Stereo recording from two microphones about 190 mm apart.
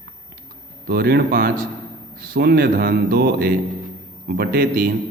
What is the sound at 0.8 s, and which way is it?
A man's voice, 55° right (ahead or behind).